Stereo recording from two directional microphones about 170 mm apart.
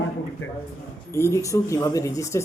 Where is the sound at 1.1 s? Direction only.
15° left (ahead or behind).